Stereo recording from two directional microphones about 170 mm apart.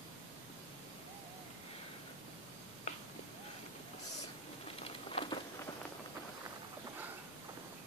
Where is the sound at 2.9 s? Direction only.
40° left (ahead or behind).